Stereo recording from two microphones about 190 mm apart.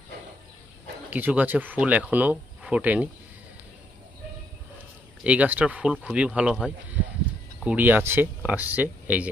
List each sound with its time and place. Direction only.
1.1 s speech: 10° right (ahead or behind)
5.2 s speech: 5° right (ahead or behind)